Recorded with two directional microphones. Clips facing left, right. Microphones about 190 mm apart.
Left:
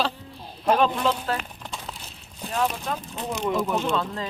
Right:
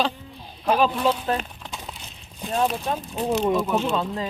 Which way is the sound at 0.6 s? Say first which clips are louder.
Right 1 dB; centre (ahead or behind).